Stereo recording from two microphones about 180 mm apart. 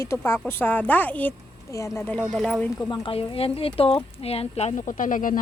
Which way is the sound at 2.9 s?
30° left (ahead or behind).